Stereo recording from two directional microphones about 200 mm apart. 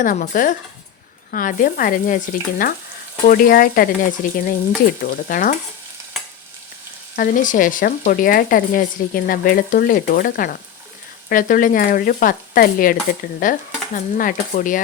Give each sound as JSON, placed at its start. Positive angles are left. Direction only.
{"t": 0.0, "sound": "stir", "side_deg": 40}
{"t": 1.3, "sound": "speech", "side_deg": 45}
{"t": 7.2, "sound": "speech", "side_deg": 40}
{"t": 13.4, "sound": "stir", "side_deg": 40}